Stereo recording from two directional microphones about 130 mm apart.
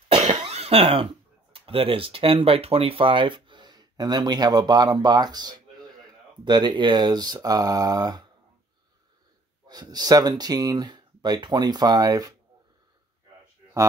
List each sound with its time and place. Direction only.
0.1 s cough: 55° right (ahead or behind)
1.5 s speech: 45° right (ahead or behind)
9.7 s speech: 30° right (ahead or behind)